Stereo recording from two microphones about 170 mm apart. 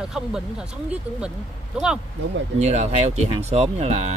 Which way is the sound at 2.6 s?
40° right (ahead or behind).